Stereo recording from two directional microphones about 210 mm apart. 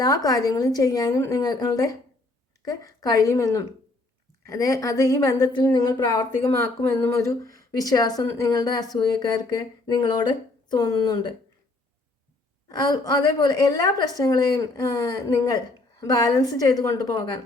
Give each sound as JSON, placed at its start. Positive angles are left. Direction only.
{"t": 0.0, "sound": "a woman's voice", "side_deg": 15}
{"t": 12.6, "sound": "a woman's voice", "side_deg": 15}